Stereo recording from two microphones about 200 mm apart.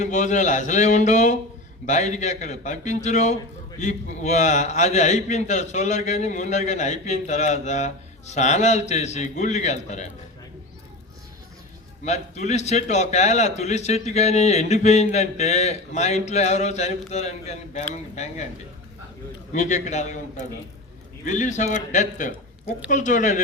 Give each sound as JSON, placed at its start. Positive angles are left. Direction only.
{"t": 0.0, "sound": "a man's voice", "side_deg": 35}
{"t": 12.0, "sound": "a man's voice", "side_deg": 35}
{"t": 19.5, "sound": "a man's voice", "side_deg": 35}